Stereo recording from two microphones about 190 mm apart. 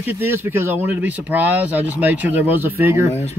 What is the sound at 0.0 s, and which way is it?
Speech, 10° right (ahead or behind).